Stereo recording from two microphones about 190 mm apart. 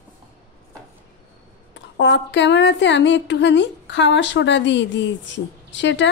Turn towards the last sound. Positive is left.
turn(degrees=70)  # may be behind; listen again after turning